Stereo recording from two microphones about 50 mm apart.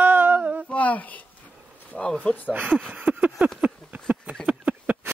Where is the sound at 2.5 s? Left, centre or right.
Right.